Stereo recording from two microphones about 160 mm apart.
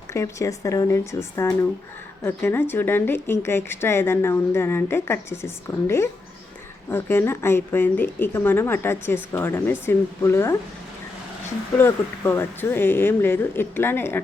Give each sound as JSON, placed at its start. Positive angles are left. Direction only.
{"t": 0.1, "sound": "speech", "side_deg": 20}
{"t": 6.9, "sound": "speech", "side_deg": 15}
{"t": 11.8, "sound": "speech", "side_deg": 15}